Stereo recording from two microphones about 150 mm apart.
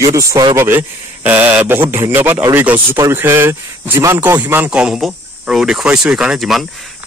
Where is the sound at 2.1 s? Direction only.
15° right (ahead or behind).